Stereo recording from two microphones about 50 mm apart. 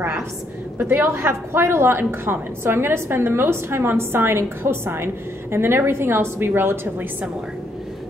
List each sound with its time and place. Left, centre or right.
0.7 s a woman's voice: right